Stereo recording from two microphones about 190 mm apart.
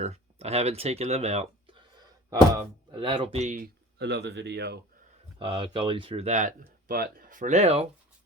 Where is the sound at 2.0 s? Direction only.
20° right (ahead or behind); by 3.7 s 40° right (ahead or behind).